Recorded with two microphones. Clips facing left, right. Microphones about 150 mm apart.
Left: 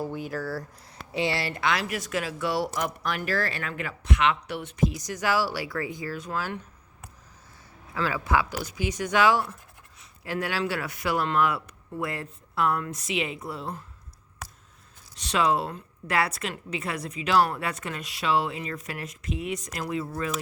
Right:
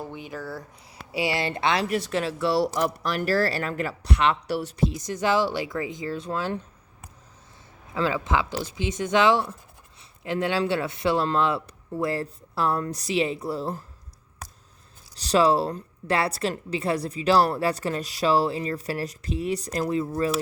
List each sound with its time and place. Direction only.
0.0 s speech: 5° left (ahead or behind)
1.1 s speech: 10° right (ahead or behind); by 6.6 s 30° right (ahead or behind)
7.9 s speech: 25° right (ahead or behind)
15.1 s speech: 35° right (ahead or behind)